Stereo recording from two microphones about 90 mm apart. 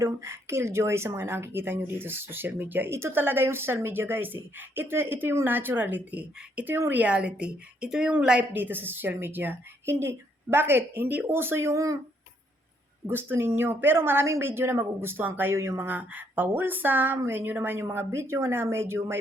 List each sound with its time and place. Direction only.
0.0 s a woman's voice: 30° right (ahead or behind)
7.0 s a woman's voice: 10° right (ahead or behind)
8.5 s a woman's voice: 20° right (ahead or behind)
13.1 s a woman's voice: 25° right (ahead or behind)